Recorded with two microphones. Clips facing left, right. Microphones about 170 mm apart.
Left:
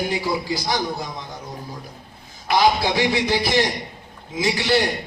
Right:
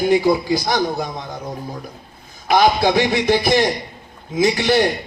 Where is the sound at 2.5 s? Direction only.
55° right (ahead or behind).